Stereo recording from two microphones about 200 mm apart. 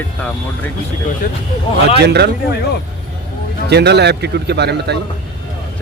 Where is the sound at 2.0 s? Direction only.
55° right (ahead or behind).